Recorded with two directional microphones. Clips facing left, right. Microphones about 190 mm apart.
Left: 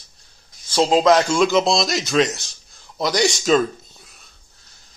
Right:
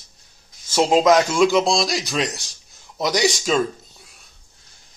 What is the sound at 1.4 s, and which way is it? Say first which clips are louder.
A man's voice: even; 5° right (ahead or behind).